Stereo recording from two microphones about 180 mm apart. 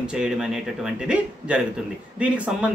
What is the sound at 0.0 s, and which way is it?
Speech, 5° right (ahead or behind).